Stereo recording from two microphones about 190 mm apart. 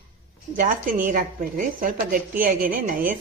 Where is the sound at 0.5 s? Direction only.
45° right (ahead or behind).